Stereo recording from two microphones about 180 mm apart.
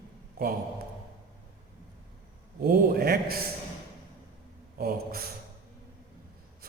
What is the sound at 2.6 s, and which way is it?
Speech, 55° right (ahead or behind).